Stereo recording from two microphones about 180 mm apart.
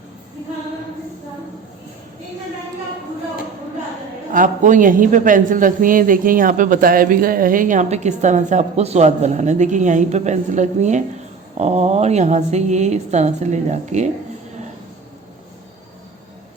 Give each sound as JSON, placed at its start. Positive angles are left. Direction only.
{"t": 4.3, "sound": "a man's voice", "side_deg": -45}